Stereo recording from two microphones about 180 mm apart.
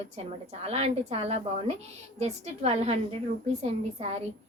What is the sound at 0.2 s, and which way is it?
A woman's voice, 35° right (ahead or behind).